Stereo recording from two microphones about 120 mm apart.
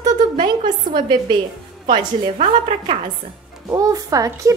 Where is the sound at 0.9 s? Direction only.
40° right (ahead or behind).